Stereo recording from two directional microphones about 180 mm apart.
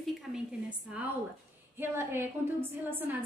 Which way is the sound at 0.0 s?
5° right (ahead or behind).